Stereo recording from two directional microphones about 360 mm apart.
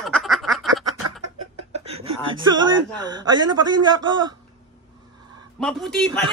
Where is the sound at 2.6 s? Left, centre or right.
Centre.